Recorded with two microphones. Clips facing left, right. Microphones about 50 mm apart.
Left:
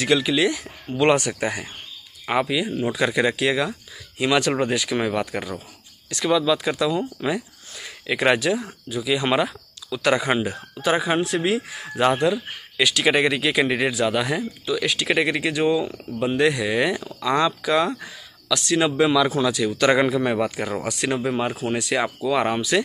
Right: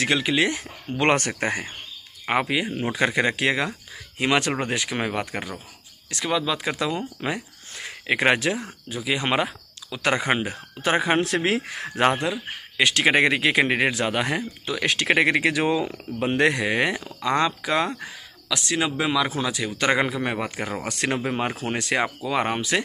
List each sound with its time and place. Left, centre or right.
0.0 s speech: right
1.3 s speech: right
11.1 s speech: right
12.0 s speech: right
16.2 s speech: right
18.9 s speech: centre
20.9 s speech: right
21.3 s speech: right
21.6 s speech: right
21.9 s speech: right